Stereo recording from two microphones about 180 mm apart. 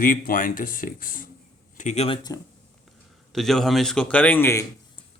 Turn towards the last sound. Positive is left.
turn(degrees=10)  # may be behind; listen again after turning